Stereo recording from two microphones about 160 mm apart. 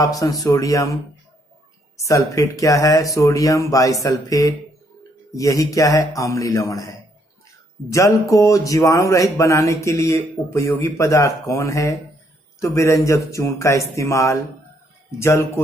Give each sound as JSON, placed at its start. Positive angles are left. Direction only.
{"t": 0.2, "sound": "speech", "side_deg": 20}
{"t": 2.0, "sound": "speech", "side_deg": 20}